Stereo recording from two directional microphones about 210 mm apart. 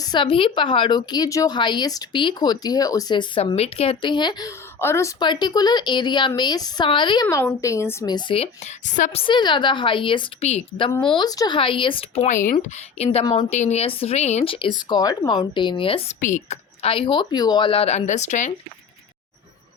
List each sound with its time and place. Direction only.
0.0 s a woman's voice: 20° left (ahead or behind)
9.2 s a woman's voice: 20° left (ahead or behind)